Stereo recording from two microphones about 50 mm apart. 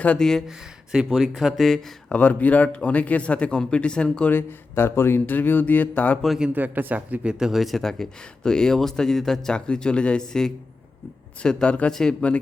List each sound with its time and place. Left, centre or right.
0.2 s speech: centre
0.4 s speech: centre
1.1 s speech: centre
2.1 s speech: left
4.3 s speech: left
5.2 s mantra: left
6.5 s a man's voice: right
7.3 s speech: centre
7.6 s speech: centre; by 11.9 s left
11.9 s speech: centre